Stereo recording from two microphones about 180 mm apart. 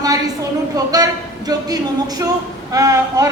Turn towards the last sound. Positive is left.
turn(degrees=-20)  # may be behind; listen again after turning